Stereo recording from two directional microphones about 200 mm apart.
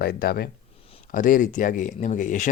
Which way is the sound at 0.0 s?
50° left (ahead or behind).